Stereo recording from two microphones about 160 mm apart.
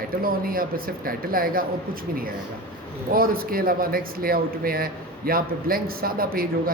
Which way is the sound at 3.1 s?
65° right (ahead or behind).